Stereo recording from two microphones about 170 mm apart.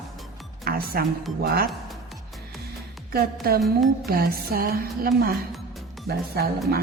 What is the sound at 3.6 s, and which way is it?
Music, centre (ahead or behind).